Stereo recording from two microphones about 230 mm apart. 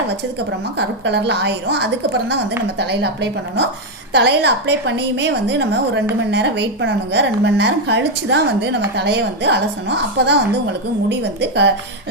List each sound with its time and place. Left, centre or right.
0.8 s a woman's voice: right